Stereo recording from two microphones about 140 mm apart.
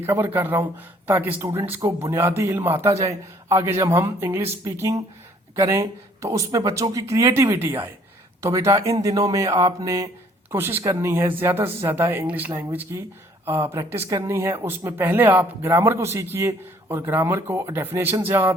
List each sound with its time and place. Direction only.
0.1 s a man's voice: 15° right (ahead or behind)